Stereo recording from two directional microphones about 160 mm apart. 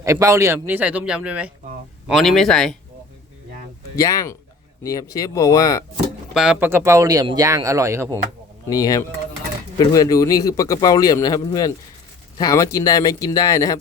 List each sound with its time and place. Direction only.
0.0 s a man's voice: 20° right (ahead or behind); by 2.7 s 5° left (ahead or behind)
3.9 s speech: 20° left (ahead or behind)
6.3 s a man's voice: 5° right (ahead or behind)
8.7 s speech: 20° left (ahead or behind)